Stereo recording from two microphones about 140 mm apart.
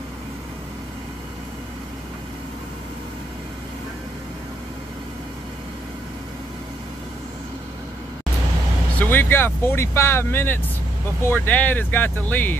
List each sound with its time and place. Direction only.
9.0 s speech: 15° left (ahead or behind)